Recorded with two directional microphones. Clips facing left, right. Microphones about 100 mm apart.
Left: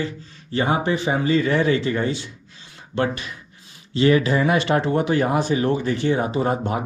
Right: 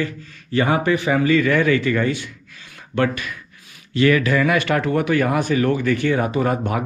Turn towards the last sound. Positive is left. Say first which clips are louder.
# right 1 dB
turn(degrees=25)  # may be behind; listen again after turning